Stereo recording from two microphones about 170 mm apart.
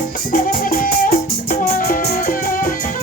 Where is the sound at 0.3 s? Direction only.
55° left (ahead or behind).